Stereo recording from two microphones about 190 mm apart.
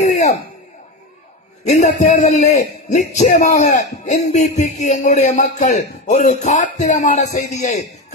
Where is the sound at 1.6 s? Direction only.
40° left (ahead or behind).